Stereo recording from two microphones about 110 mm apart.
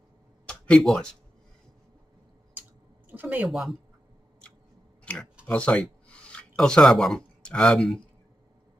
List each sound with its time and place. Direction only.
0.5 s speech: 5° left (ahead or behind)
3.1 s speech: 15° right (ahead or behind)
3.4 s speech: centre (ahead or behind)
5.0 s a sound: 5° left (ahead or behind)
5.4 s speech: 10° left (ahead or behind)